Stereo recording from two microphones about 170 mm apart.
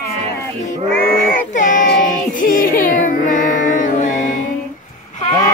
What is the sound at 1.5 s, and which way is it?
Music, 50° left (ahead or behind).